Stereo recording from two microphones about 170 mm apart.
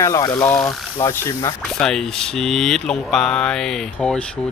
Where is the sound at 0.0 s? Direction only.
20° left (ahead or behind).